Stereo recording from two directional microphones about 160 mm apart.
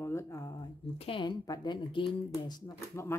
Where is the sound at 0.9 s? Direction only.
35° left (ahead or behind).